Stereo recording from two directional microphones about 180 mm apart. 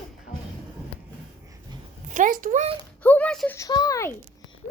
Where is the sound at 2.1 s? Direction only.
45° right (ahead or behind).